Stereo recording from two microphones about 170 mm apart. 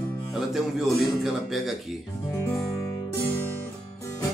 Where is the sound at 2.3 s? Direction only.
15° left (ahead or behind).